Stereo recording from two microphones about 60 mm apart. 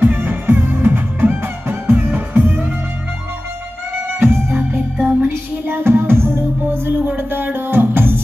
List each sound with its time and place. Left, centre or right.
0.0 s music: right
4.2 s music: right
5.3 s music: right